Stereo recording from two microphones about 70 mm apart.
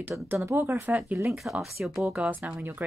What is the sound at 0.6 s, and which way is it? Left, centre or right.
Speech, right.